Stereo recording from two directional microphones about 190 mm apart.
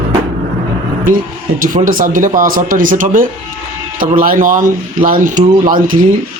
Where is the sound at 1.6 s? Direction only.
45° right (ahead or behind).